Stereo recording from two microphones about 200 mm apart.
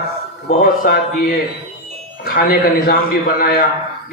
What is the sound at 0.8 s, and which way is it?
Speech, 45° left (ahead or behind).